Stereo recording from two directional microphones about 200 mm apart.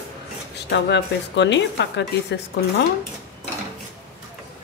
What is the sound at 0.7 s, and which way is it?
Speech, 60° left (ahead or behind).